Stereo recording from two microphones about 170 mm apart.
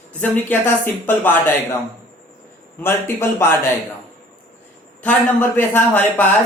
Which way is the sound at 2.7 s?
15° left (ahead or behind).